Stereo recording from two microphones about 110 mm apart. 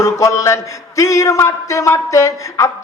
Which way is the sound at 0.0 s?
30° left (ahead or behind).